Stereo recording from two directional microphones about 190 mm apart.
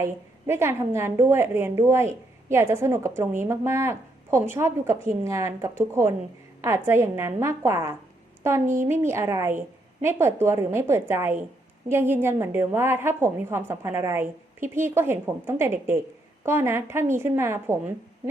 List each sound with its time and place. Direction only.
0.0 s a woman's voice: 15° right (ahead or behind)
8.6 s speech: 40° right (ahead or behind)
8.9 s a woman's voice: 15° right (ahead or behind)